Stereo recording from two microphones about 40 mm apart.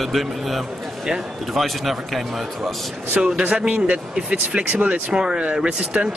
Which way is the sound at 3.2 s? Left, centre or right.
Centre.